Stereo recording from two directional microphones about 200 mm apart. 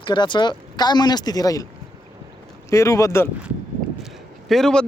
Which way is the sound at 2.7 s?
15° left (ahead or behind).